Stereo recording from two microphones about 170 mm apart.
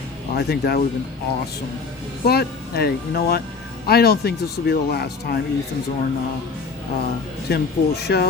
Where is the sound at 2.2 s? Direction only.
65° left (ahead or behind).